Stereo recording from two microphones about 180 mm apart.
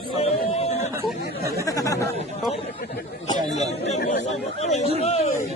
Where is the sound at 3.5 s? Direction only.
40° left (ahead or behind).